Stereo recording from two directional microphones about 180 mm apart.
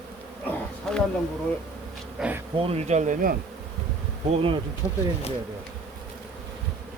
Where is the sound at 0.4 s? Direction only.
5° left (ahead or behind).